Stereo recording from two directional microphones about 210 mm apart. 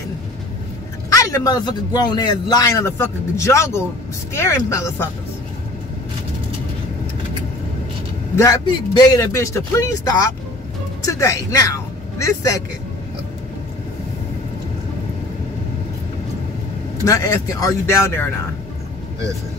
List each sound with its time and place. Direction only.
1.1 s a man's voice: 15° left (ahead or behind)
8.4 s a man's voice: 15° left (ahead or behind)
11.0 s speech: 15° left (ahead or behind)
17.0 s a man's voice: 15° left (ahead or behind)